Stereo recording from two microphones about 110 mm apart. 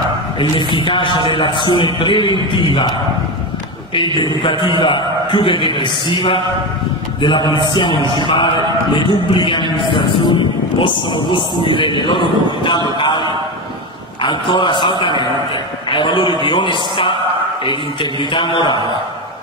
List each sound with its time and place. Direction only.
0.7 s a man's voice: 50° left (ahead or behind)
3.9 s a man's voice: 45° left (ahead or behind)
10.8 s a man's voice: 45° left (ahead or behind)
13.0 s a sound: 40° left (ahead or behind)
14.2 s a man's voice: 45° left (ahead or behind)
18.2 s a man's voice: 50° left (ahead or behind)